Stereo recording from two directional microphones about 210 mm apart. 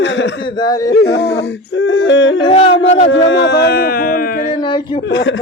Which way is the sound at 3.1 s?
60° left (ahead or behind).